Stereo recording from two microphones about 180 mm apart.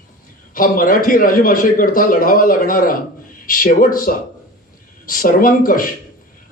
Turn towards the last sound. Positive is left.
turn(degrees=50)  # may be behind; listen again after turning